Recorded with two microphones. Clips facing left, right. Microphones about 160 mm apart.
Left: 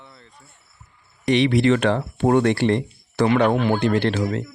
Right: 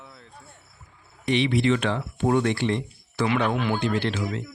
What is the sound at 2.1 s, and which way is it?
Speech, 55° left (ahead or behind).